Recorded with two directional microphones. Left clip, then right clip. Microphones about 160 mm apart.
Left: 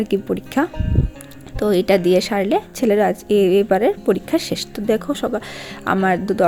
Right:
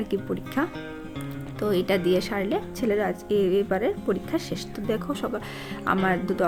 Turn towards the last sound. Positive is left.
turn(degrees=40)  # may be behind; listen again after turning